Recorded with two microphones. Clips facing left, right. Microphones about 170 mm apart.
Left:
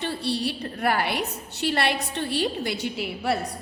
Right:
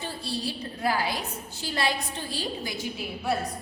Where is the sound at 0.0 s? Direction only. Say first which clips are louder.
Left 6 dB; 70° left (ahead or behind).